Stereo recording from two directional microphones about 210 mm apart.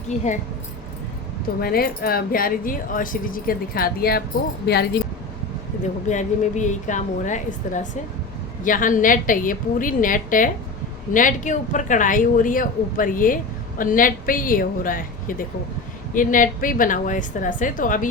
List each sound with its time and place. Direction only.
0.1 s speech: 35° left (ahead or behind)
1.6 s speech: 45° left (ahead or behind)
6.1 s speech: 35° left (ahead or behind)